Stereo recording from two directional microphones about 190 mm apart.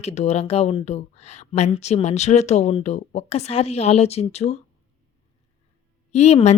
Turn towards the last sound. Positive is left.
turn(degrees=35)  # may be behind; listen again after turning